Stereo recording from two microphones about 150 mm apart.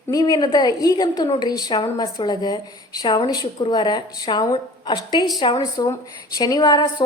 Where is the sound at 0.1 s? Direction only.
25° left (ahead or behind).